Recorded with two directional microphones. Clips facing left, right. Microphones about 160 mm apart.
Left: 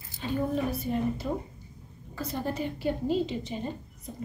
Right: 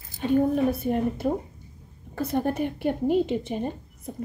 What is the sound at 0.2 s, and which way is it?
A woman's voice, 55° right (ahead or behind).